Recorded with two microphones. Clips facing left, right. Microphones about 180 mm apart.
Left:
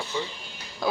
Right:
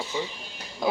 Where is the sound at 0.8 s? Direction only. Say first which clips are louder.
Right 1 dB; 20° right (ahead or behind).